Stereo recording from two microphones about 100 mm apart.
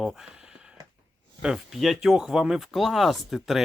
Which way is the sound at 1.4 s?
5° right (ahead or behind).